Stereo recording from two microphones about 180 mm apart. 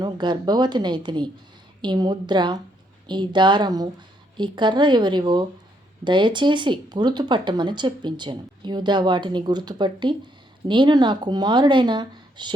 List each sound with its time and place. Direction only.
0.0 s speech: 25° right (ahead or behind)